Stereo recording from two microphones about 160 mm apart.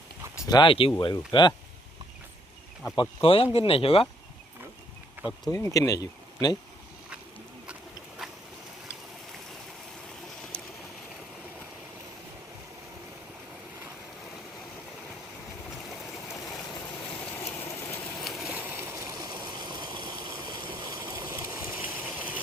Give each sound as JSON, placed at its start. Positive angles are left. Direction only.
{"t": 0.3, "sound": "speech", "side_deg": 25}
{"t": 2.9, "sound": "speech", "side_deg": 30}
{"t": 5.5, "sound": "speech", "side_deg": 20}
{"t": 8.2, "sound": "boat", "side_deg": 0}
{"t": 10.5, "sound": "a sound", "side_deg": 5}
{"t": 17.3, "sound": "engine", "side_deg": 15}
{"t": 18.2, "sound": "stream", "side_deg": 0}